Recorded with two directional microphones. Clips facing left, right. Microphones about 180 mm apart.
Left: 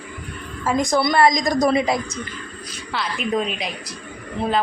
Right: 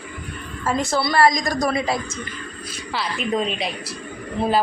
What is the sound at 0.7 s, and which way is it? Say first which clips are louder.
A woman's voice: left 3 dB; 15° left (ahead or behind).